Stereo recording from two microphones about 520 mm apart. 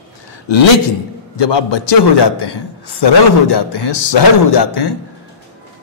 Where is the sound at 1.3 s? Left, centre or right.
Left.